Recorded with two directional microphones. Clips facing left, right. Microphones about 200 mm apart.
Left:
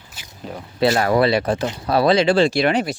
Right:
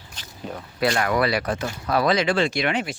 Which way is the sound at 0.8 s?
30° left (ahead or behind).